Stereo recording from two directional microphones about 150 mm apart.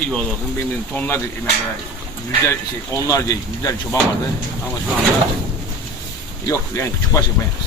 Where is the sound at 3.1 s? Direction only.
20° left (ahead or behind).